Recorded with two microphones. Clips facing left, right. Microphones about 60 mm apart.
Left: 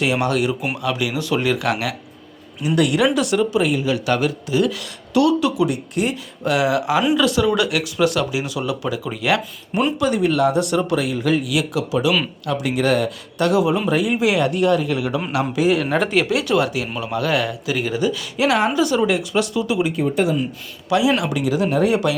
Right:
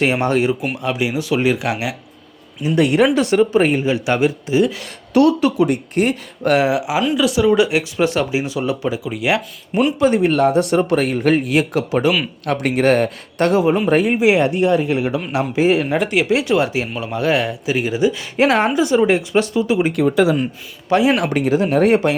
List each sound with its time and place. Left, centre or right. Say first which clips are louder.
0.0 s speech: right 3 dB; right
2.7 s speech: right 3 dB; right
5.1 s speech: right 3 dB; right
6.7 s speech: even; centre
7.4 s speech: right 4 dB; right
10.0 s speech: right 3 dB; right
14.2 s speech: right 3 dB; right
16.0 s speech: right 1 dB; centre
16.3 s speech: right 2 dB; right
16.9 s speech: right 2 dB; centre
18.3 s speech: right 2 dB; right
18.7 s speech: right 3 dB; right
19.9 s speech: right 4 dB; right
20.9 s speech: right 3 dB; right